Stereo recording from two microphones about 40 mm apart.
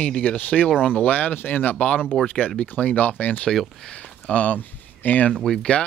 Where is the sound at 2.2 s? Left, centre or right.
Left.